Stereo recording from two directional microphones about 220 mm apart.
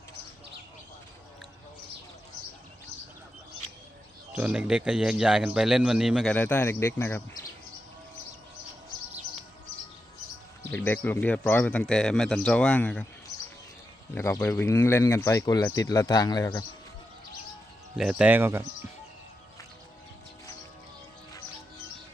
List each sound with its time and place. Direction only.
4.3 s speech: 5° right (ahead or behind)
6.3 s speech: 10° left (ahead or behind)
10.7 s speech: 10° left (ahead or behind)
14.2 s speech: 10° left (ahead or behind)
17.9 s speech: 5° right (ahead or behind)